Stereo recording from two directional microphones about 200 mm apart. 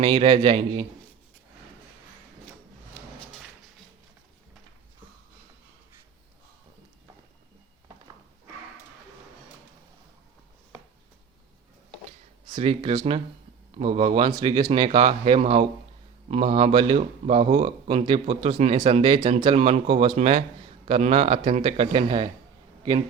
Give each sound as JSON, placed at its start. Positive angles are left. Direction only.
{"t": 0.0, "sound": "speech", "side_deg": -25}
{"t": 12.5, "sound": "speech", "side_deg": -25}